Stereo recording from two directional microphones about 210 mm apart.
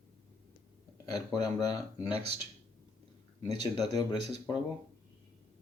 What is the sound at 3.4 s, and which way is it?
Speech, 20° left (ahead or behind).